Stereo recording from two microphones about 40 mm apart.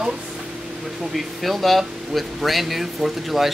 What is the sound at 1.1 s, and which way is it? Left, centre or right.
Speech, centre.